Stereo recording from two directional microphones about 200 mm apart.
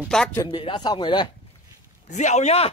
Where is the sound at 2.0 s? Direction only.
35° left (ahead or behind).